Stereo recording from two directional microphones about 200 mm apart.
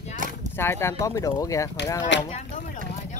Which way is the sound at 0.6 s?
15° left (ahead or behind).